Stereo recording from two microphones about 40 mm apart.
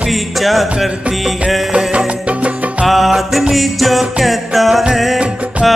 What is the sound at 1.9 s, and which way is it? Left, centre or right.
Music, right.